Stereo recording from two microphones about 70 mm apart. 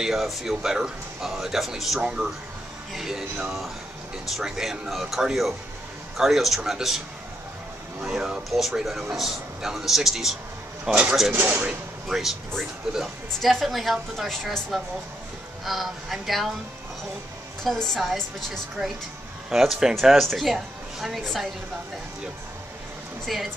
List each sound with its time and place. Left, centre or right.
0.0 s speech: centre
8.0 s speech: centre
11.3 s speech: right
12.1 s speech: centre
17.6 s a woman's voice: centre
23.2 s speech: centre